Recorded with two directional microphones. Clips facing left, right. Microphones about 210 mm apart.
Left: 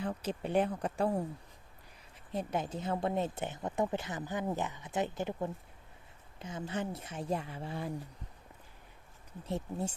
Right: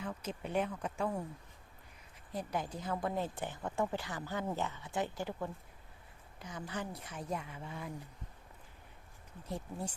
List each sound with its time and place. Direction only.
0.0 s speech: 30° left (ahead or behind)
2.3 s speech: 25° left (ahead or behind)
9.5 s speech: 25° left (ahead or behind)